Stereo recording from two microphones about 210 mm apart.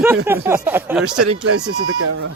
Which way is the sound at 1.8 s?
85° right.